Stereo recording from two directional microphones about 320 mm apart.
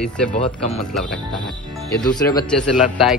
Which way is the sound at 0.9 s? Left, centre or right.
Centre.